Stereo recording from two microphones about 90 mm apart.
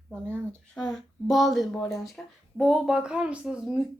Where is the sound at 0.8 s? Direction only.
Centre (ahead or behind).